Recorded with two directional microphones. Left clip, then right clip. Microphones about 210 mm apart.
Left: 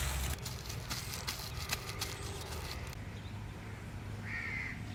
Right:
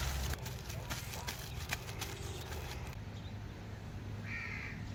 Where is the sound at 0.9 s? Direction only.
10° right (ahead or behind).